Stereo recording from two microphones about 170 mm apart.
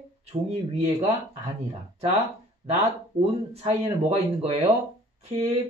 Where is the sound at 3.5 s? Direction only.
35° right (ahead or behind).